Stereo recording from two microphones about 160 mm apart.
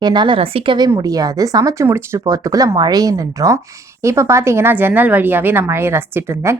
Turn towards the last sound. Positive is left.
turn(degrees=-15)  # may be behind; listen again after turning